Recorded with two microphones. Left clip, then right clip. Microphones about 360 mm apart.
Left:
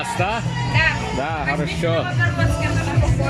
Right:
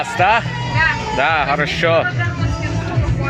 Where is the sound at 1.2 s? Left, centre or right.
Right.